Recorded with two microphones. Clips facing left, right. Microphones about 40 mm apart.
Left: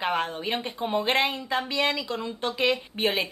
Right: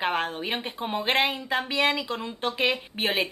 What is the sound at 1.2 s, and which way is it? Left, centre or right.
A woman's voice, right.